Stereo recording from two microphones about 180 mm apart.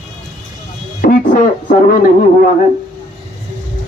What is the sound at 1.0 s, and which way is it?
Speech, 50° left (ahead or behind).